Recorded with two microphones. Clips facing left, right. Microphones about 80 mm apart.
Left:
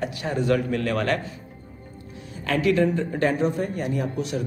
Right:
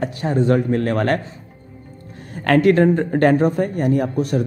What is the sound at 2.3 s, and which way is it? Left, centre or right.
Speech, right.